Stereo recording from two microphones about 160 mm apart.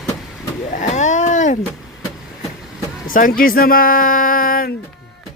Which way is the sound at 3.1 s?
60° left (ahead or behind).